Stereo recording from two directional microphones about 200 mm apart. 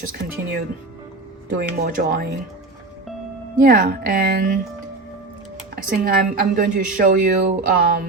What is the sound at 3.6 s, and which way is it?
Speech, 45° right (ahead or behind).